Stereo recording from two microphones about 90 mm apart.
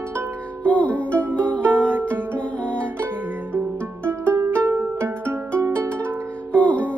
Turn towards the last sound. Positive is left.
turn(degrees=15)  # may be behind; listen again after turning